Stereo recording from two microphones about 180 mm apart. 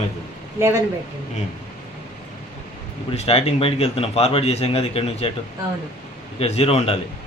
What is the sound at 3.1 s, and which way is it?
Speech, 35° left (ahead or behind).